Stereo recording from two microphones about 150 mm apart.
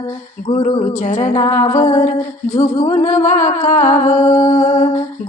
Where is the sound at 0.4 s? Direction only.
55° left (ahead or behind).